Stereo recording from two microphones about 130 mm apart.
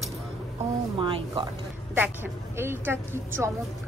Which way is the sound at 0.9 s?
40° right (ahead or behind).